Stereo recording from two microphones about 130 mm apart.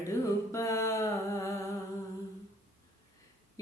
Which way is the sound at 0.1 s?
25° left (ahead or behind).